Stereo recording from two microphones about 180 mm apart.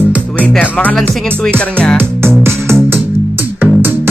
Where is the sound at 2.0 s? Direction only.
15° right (ahead or behind).